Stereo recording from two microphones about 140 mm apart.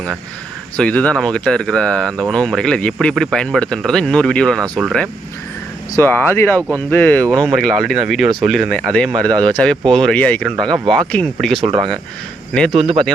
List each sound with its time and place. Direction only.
0.8 s speech: 10° left (ahead or behind)
6.0 s speech: 15° left (ahead or behind)